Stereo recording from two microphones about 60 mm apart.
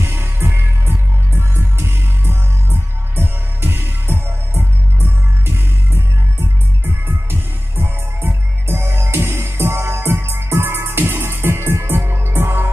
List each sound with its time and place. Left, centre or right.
0.0 s music: right
7.1 s music: right